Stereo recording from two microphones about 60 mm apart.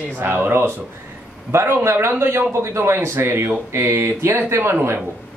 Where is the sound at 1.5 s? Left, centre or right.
Right.